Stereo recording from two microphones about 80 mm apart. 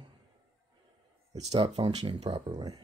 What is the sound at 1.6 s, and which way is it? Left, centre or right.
Speech, right.